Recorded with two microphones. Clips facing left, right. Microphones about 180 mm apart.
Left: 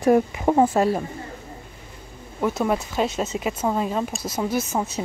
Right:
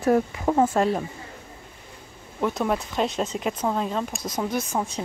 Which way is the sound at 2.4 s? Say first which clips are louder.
Left 2 dB; 5° left (ahead or behind).